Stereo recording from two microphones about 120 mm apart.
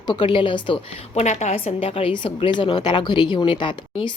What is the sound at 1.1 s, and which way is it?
A woman's voice, 80° left.